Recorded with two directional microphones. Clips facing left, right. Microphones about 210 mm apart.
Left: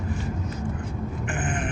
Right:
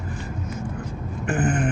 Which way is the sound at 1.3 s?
40° right (ahead or behind).